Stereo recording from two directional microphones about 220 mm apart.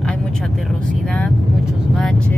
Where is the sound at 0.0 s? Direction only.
5° left (ahead or behind).